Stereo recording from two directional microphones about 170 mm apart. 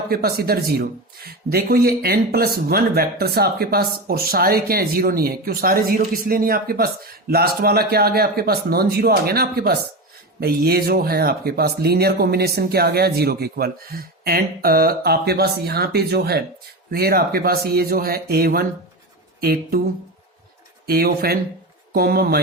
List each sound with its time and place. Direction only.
0.1 s speech: 65° right (ahead or behind)
20.8 s speech: 65° right (ahead or behind)